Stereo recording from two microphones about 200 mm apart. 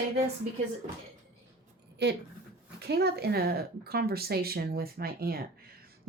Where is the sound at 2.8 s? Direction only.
55° right (ahead or behind).